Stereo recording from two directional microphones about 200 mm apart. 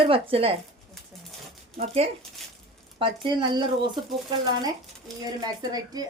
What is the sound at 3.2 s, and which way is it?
Speech, 25° right (ahead or behind).